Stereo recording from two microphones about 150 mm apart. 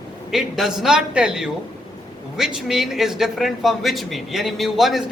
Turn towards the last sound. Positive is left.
turn(degrees=0)  # may be behind; listen again after turning